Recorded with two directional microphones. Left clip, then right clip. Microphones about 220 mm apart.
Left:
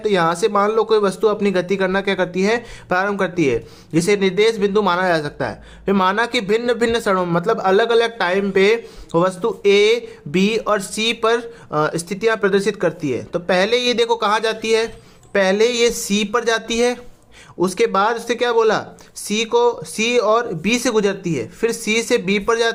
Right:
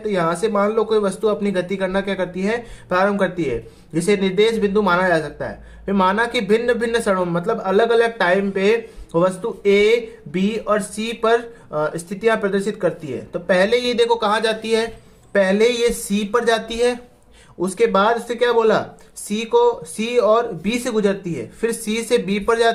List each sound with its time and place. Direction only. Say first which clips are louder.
0.0 s a man's voice: left 3 dB; 30° left (ahead or behind)